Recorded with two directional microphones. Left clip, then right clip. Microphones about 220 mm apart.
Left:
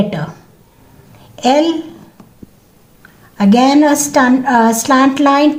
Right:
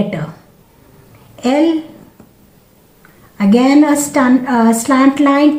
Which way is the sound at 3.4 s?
50° left (ahead or behind).